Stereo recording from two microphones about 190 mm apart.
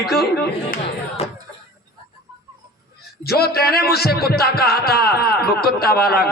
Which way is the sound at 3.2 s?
55° left (ahead or behind).